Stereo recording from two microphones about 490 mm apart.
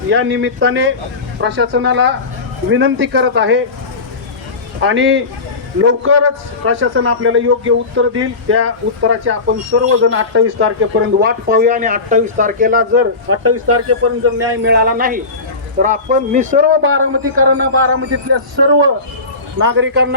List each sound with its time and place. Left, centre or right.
0.1 s speech: right
4.8 s speech: right
19.5 s speech: right